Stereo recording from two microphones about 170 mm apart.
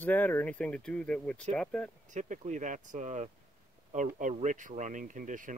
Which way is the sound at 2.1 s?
45° right (ahead or behind).